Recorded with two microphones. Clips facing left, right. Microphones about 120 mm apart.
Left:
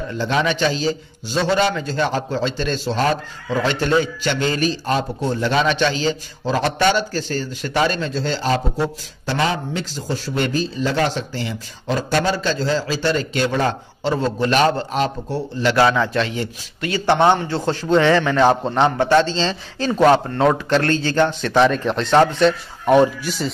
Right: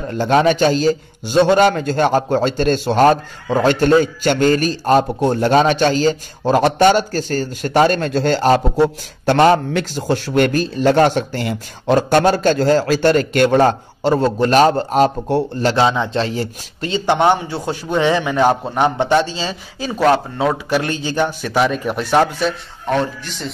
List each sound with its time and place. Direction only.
0.1 s a man's voice: 50° right (ahead or behind)
15.2 s a man's voice: 60° right (ahead or behind)
15.7 s a man's voice: 20° right (ahead or behind)
16.2 s a man's voice: 35° right (ahead or behind)
16.9 s a man's voice: 15° right (ahead or behind)
22.8 s speech: 15° left (ahead or behind)